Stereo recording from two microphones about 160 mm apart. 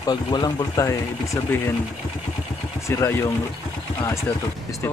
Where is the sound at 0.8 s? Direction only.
15° left (ahead or behind).